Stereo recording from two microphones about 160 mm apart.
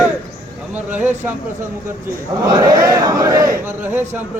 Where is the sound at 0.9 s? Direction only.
15° right (ahead or behind).